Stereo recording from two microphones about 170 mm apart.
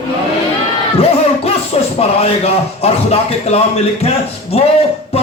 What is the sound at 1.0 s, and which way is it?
Music, 35° left (ahead or behind).